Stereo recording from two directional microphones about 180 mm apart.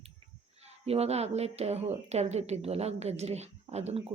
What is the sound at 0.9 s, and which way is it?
Speech, 35° right (ahead or behind).